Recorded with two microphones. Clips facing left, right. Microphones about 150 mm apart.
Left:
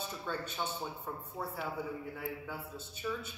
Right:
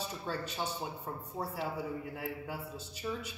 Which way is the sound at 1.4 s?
30° right (ahead or behind).